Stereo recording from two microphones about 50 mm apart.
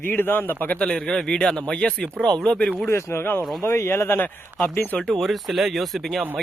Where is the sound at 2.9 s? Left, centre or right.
Left.